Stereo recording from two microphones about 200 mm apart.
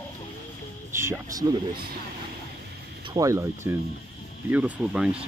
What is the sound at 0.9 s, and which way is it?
Speech, 15° right (ahead or behind).